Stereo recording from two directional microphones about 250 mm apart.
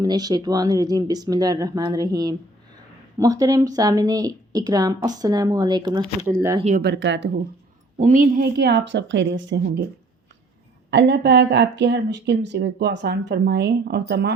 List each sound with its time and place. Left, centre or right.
0.0 s a woman's voice: centre
6.7 s a woman's voice: right
8.0 s a woman's voice: right
10.9 s speech: right